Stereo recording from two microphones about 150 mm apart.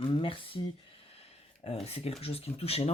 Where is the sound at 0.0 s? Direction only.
35° left (ahead or behind).